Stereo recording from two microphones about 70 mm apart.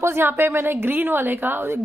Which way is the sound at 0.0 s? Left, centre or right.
Right.